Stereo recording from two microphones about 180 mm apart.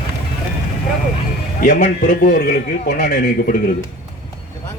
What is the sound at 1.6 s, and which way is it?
A man's voice, 50° left (ahead or behind).